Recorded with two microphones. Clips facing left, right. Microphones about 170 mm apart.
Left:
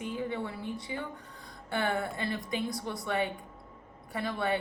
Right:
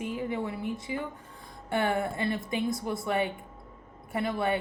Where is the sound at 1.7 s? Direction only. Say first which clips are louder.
Right 3 dB; 25° right (ahead or behind).